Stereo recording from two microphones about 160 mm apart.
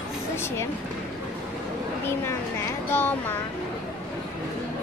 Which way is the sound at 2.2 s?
15° left (ahead or behind).